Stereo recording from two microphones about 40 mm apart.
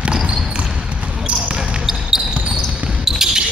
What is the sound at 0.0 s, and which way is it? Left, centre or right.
Basketball bounce, right.